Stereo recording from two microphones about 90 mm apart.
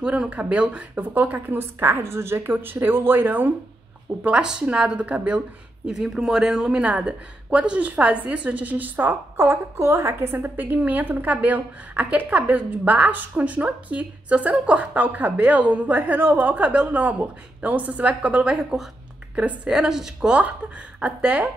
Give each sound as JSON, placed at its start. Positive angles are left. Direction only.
{"t": 0.0, "sound": "speech", "side_deg": -10}
{"t": 4.2, "sound": "speech", "side_deg": -10}